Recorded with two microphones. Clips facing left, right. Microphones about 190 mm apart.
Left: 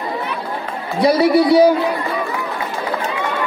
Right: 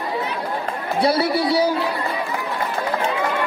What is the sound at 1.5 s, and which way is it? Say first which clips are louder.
Speech: left 9 dB; 55° left (ahead or behind).